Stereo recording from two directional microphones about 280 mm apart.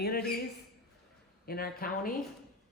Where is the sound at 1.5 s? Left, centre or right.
Left.